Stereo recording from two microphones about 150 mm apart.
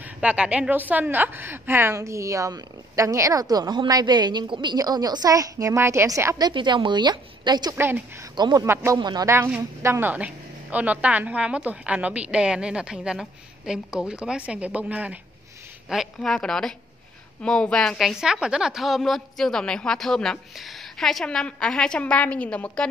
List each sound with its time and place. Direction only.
0.0 s a woman's voice: 10° right (ahead or behind); by 7.7 s 30° right (ahead or behind)
7.7 s a woman's voice: 15° right (ahead or behind)
8.4 s a woman's voice: 30° right (ahead or behind); by 22.8 s 10° left (ahead or behind)